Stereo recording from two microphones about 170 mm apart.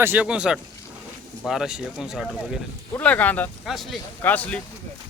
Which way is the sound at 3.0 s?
10° left (ahead or behind).